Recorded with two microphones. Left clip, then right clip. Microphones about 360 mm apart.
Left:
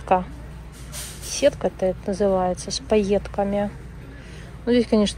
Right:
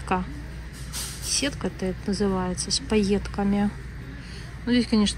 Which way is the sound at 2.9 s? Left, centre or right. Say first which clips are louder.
Left 7 dB; centre.